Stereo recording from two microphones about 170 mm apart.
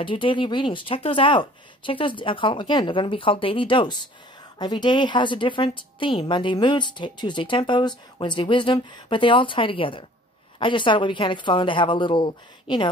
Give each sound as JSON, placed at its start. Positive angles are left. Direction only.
{"t": 0.0, "sound": "a woman's voice", "side_deg": 30}